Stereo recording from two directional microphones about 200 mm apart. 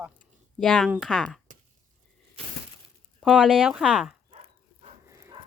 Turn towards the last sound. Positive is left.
turn(degrees=-15)  # may be behind; listen again after turning